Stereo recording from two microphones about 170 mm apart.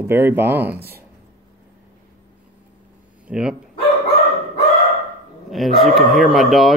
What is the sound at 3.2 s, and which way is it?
Speech, 5° right (ahead or behind).